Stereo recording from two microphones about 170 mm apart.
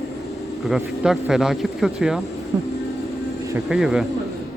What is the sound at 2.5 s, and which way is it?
Music, 25° right (ahead or behind).